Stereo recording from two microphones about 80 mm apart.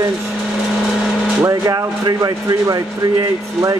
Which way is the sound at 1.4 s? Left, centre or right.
Right.